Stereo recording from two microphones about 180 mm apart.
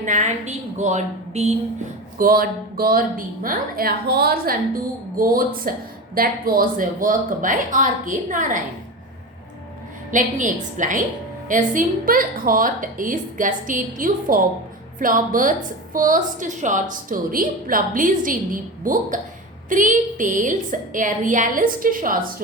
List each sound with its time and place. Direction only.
0.0 s a woman's voice: 45° right (ahead or behind)
2.1 s a woman's voice: 55° right (ahead or behind)
10.1 s a woman's voice: 45° right (ahead or behind)